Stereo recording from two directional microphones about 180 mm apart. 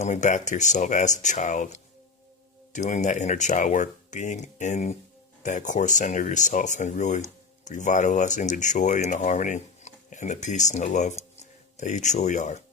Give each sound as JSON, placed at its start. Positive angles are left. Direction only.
{"t": 0.0, "sound": "speech", "side_deg": 40}